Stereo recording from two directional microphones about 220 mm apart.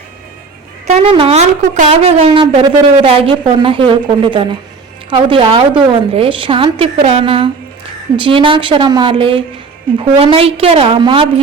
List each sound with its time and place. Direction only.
0.9 s speech: 25° right (ahead or behind)